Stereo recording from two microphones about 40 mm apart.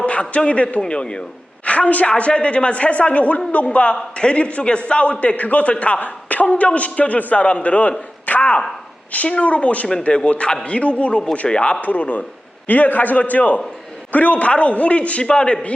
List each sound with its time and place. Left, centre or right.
0.0 s a man's voice: left
11.8 s a man's voice: left